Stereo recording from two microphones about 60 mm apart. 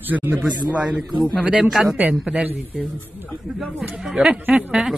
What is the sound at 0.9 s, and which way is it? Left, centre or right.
A man's voice, centre.